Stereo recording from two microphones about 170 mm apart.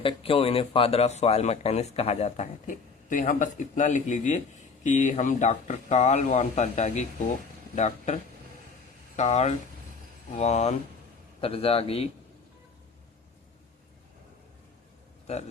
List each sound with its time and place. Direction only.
0.0 s speech: 30° left (ahead or behind)